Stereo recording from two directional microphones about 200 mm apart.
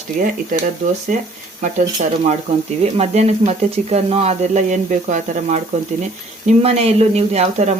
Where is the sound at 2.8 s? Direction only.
30° right (ahead or behind).